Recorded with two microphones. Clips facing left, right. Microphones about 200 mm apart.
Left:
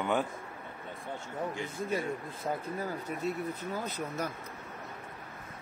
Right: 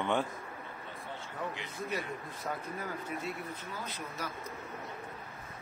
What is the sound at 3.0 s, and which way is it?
Speech, 45° left (ahead or behind).